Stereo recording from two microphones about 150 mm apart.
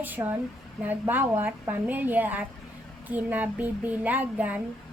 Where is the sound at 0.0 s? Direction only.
10° right (ahead or behind).